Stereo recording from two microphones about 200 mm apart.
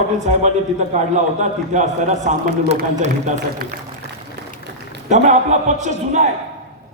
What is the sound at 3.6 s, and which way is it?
Speech, 50° right (ahead or behind).